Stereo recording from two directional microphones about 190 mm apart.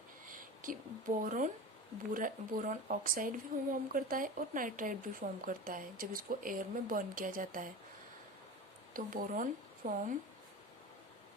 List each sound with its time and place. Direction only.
0.3 s speech: 45° right (ahead or behind)
8.9 s a woman's voice: 45° right (ahead or behind)